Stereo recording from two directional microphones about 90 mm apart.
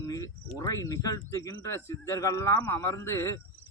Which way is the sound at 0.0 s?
40° left (ahead or behind).